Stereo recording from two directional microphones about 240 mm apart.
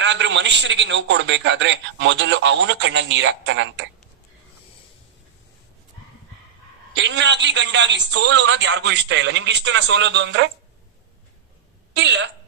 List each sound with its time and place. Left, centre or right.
0.0 s a man's voice: right
6.9 s a man's voice: right
11.9 s a man's voice: right